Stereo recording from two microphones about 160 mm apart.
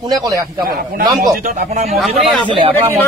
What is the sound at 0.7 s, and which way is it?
Speech, 70° right (ahead or behind).